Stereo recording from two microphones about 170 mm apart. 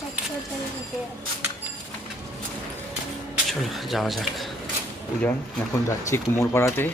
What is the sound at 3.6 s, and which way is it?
Speech, centre (ahead or behind).